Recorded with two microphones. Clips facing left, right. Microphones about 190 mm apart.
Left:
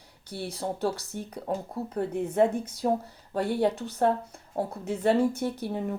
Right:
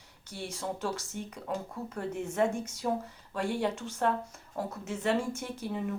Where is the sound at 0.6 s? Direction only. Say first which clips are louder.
Left 5 dB; 35° left (ahead or behind).